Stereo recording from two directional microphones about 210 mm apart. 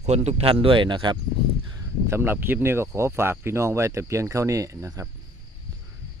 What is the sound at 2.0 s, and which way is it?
Speech, 10° right (ahead or behind).